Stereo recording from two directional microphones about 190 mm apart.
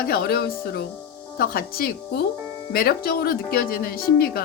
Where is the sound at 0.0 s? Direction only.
50° left (ahead or behind).